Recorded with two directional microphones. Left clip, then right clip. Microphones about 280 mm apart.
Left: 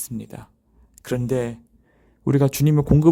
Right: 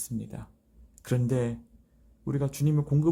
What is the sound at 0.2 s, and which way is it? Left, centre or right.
Speech, left.